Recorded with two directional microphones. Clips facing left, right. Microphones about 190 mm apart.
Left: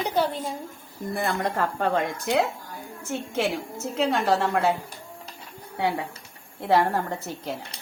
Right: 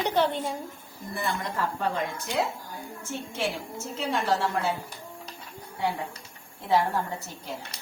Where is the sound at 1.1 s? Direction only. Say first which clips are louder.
Left 4 dB; 45° left (ahead or behind); by 4.2 s 70° left (ahead or behind).